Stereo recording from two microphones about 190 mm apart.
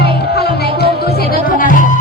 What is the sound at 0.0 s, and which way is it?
Music, 55° left (ahead or behind).